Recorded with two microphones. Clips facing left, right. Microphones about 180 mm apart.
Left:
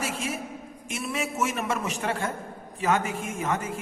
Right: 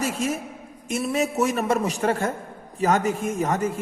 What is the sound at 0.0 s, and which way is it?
A woman's voice, 40° right (ahead or behind).